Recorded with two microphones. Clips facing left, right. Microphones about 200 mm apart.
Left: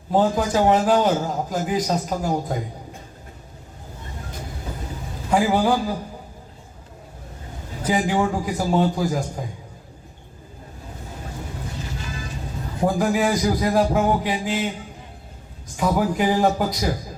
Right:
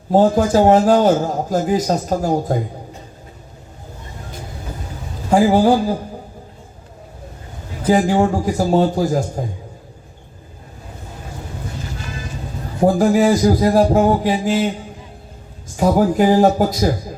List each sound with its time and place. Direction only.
0.1 s a man's voice: 45° right (ahead or behind)
5.3 s a man's voice: 40° right (ahead or behind)
7.9 s a man's voice: 40° right (ahead or behind)
12.8 s a man's voice: 40° right (ahead or behind)
15.8 s a man's voice: 45° right (ahead or behind)